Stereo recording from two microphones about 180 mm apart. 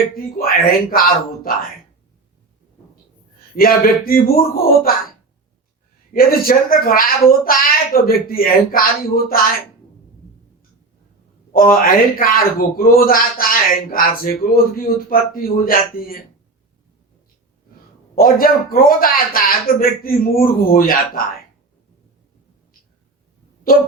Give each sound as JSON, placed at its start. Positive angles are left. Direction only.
{"t": 0.1, "sound": "a man's voice", "side_deg": 55}
{"t": 3.5, "sound": "speech", "side_deg": 55}
{"t": 6.1, "sound": "a man's voice", "side_deg": 55}
{"t": 11.5, "sound": "a man's voice", "side_deg": 55}
{"t": 18.1, "sound": "a man's voice", "side_deg": 50}